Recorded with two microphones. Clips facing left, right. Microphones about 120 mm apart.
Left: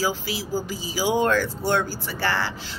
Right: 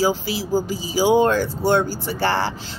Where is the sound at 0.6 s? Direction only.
20° right (ahead or behind).